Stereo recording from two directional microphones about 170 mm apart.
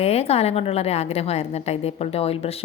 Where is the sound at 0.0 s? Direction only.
35° left (ahead or behind).